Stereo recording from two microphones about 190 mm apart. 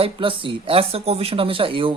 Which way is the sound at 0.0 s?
25° right (ahead or behind).